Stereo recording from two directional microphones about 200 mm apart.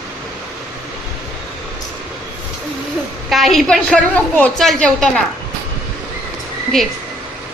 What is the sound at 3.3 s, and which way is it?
A woman's voice, centre (ahead or behind).